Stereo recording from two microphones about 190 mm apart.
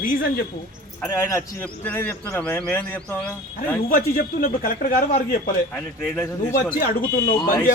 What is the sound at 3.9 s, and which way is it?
A man's voice, 45° left (ahead or behind).